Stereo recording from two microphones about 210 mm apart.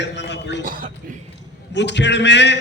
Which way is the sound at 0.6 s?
40° right (ahead or behind).